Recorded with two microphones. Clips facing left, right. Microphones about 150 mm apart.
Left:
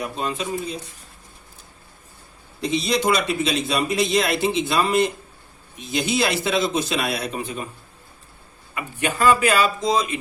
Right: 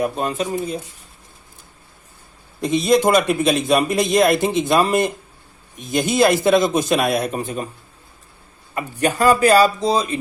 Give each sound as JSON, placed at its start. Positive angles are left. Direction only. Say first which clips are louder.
{"t": 0.0, "sound": "a man's voice", "louder": "right 5 dB", "side_deg": -50}
{"t": 2.6, "sound": "a man's voice", "louder": "right 6 dB", "side_deg": -50}
{"t": 8.7, "sound": "speech", "louder": "right 5 dB", "side_deg": -40}